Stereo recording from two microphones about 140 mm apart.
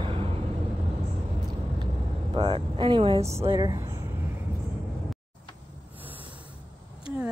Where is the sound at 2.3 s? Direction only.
40° right (ahead or behind).